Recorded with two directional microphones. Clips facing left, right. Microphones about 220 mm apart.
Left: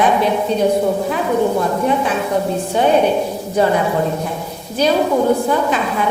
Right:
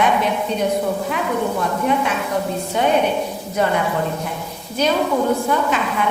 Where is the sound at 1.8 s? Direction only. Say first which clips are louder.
Left 3 dB; 35° left (ahead or behind).